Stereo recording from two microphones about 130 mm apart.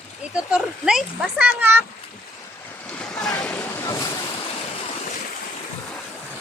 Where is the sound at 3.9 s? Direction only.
25° left (ahead or behind).